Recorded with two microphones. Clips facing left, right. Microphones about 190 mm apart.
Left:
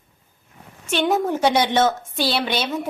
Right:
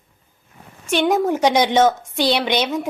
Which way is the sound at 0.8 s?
10° right (ahead or behind).